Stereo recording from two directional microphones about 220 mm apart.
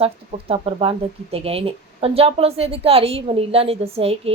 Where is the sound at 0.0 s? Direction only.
25° right (ahead or behind).